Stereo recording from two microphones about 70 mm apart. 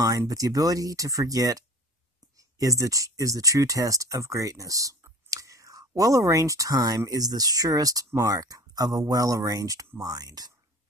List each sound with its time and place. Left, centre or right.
0.3 s speech: right